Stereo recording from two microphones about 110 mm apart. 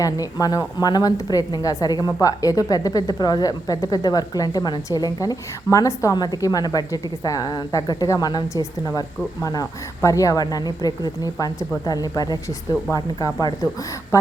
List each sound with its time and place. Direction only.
0.0 s a woman's voice: 35° left (ahead or behind)